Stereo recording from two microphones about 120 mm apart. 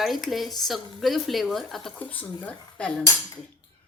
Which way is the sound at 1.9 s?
15° left (ahead or behind).